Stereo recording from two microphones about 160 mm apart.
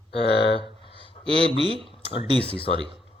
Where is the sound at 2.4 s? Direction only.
35° left (ahead or behind).